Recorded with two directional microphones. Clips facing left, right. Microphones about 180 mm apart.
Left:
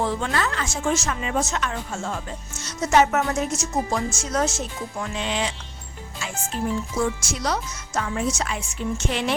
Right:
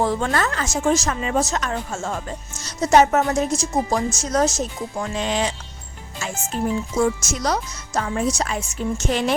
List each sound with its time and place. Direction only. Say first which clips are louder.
0.0 s speech: right 3 dB; 45° right (ahead or behind)
7.0 s speech: right 6 dB; 45° right (ahead or behind)